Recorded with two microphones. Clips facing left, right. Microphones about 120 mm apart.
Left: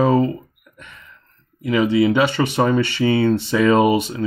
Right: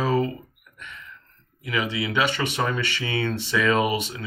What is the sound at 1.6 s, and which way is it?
Speech, 35° left (ahead or behind).